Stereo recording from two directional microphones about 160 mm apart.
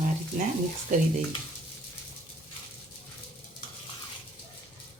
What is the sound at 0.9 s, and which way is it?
Speech, 50° right (ahead or behind).